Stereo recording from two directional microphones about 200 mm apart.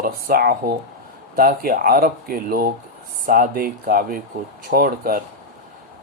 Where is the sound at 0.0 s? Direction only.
45° right (ahead or behind).